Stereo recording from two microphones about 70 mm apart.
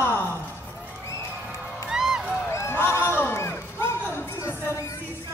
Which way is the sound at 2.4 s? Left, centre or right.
Left.